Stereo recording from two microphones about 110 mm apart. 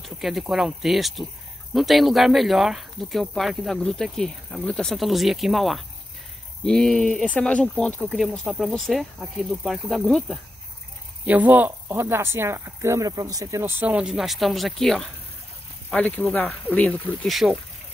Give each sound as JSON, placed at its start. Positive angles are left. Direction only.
{"t": 0.0, "sound": "speech", "side_deg": 0}
{"t": 11.2, "sound": "speech", "side_deg": -15}